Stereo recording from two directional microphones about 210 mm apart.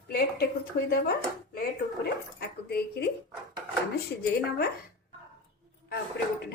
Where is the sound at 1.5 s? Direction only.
45° left (ahead or behind).